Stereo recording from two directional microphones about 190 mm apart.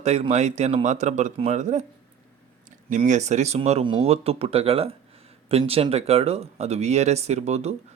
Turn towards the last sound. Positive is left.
turn(degrees=-35)  # may be behind; listen again after turning